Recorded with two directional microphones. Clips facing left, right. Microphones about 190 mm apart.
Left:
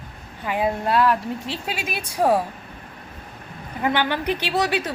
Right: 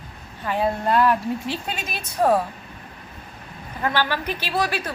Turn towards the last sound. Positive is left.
turn(degrees=20)  # may be behind; listen again after turning